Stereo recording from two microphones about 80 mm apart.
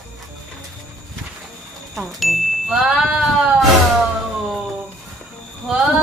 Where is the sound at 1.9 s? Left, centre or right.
Centre.